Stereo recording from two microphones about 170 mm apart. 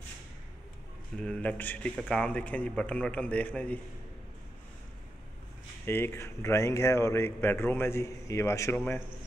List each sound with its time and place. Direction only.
1.1 s speech: 5° left (ahead or behind)
5.9 s speech: 15° left (ahead or behind)